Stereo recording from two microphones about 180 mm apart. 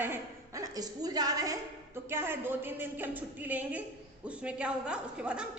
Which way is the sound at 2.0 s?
15° right (ahead or behind).